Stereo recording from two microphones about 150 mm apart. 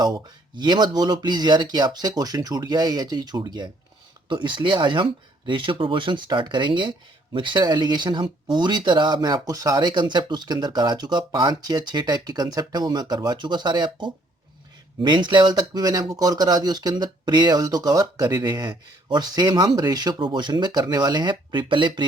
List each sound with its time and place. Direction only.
0.0 s speech: 25° right (ahead or behind)